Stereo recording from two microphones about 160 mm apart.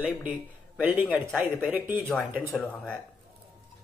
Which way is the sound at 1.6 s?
10° right (ahead or behind).